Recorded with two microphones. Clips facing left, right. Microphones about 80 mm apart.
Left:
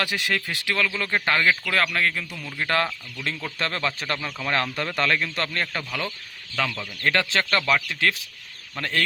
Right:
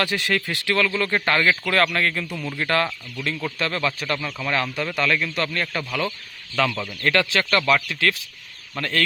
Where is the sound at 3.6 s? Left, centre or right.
Left.